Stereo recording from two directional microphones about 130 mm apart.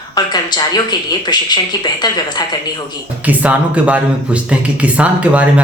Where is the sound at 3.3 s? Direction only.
10° right (ahead or behind).